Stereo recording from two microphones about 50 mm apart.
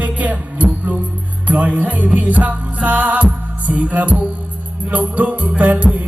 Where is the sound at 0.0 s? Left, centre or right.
Right.